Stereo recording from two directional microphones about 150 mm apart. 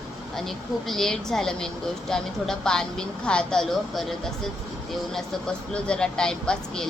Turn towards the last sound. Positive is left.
turn(degrees=5)  # may be behind; listen again after turning